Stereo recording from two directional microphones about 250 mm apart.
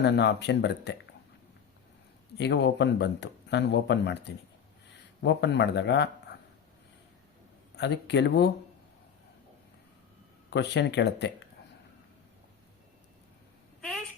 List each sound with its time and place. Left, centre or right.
0.0 s speech: left
2.4 s speech: left
7.8 s speech: left
10.5 s speech: left